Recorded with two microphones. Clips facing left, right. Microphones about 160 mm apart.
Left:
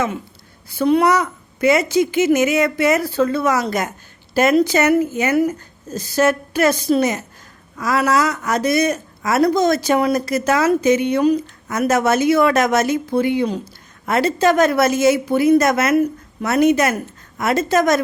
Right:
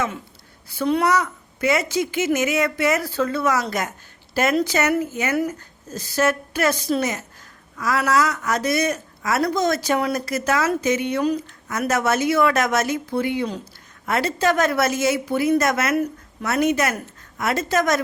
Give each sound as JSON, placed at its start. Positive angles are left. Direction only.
{"t": 0.9, "sound": "a woman's voice", "side_deg": 15}